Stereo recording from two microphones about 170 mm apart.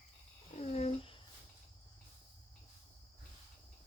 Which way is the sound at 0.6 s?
40° left (ahead or behind).